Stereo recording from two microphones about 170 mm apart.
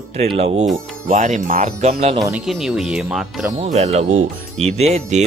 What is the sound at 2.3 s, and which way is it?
Speech, centre (ahead or behind).